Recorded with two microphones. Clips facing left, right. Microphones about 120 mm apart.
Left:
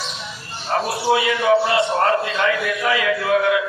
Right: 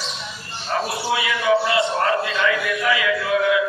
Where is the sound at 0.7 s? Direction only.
40° left (ahead or behind).